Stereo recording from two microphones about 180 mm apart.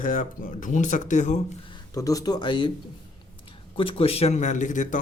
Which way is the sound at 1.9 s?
20° left (ahead or behind).